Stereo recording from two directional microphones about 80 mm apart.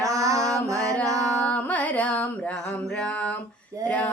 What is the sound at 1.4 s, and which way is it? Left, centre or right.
Carnatic music, centre.